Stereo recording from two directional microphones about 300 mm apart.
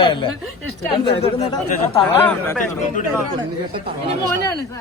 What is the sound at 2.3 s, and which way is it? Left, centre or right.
Speech, centre.